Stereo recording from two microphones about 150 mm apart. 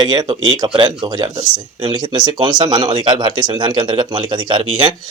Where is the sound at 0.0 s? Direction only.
25° right (ahead or behind).